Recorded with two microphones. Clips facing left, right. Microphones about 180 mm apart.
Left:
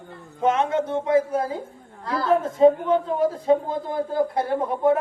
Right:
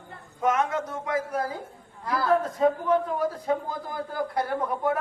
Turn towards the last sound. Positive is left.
turn(degrees=25)  # may be behind; listen again after turning